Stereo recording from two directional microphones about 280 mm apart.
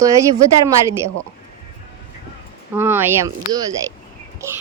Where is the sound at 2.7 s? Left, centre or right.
Centre.